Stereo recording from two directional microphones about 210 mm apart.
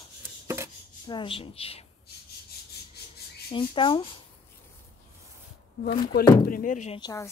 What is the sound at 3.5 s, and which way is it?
Speech, 25° left (ahead or behind).